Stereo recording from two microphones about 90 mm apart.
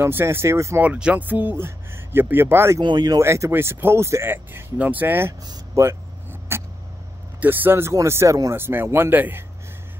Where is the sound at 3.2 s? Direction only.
30° right (ahead or behind).